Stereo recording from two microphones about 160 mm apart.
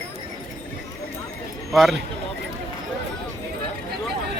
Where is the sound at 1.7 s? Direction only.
Centre (ahead or behind).